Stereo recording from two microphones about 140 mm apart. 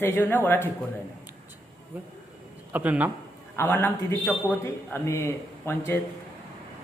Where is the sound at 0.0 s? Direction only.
15° left (ahead or behind).